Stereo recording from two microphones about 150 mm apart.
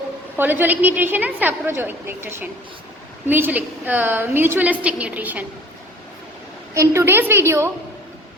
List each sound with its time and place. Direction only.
0.3 s a woman's voice: 15° right (ahead or behind)
6.7 s a woman's voice: 15° right (ahead or behind)